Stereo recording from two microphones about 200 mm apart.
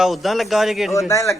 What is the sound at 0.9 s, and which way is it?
Speech, 15° left (ahead or behind).